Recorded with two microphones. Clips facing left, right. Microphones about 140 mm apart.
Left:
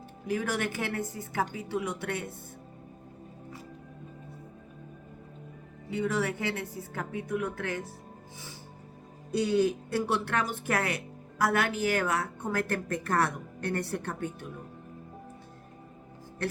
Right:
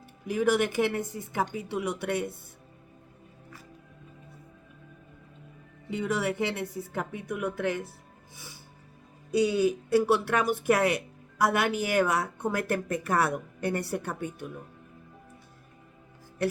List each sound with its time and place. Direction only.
0.3 s speech: 15° right (ahead or behind)
5.9 s speech: 20° right (ahead or behind)
9.3 s speech: 10° right (ahead or behind)